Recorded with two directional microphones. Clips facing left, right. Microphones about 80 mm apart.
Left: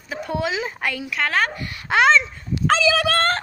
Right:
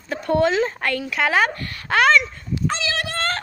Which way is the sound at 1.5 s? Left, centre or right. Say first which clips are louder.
Even; centre.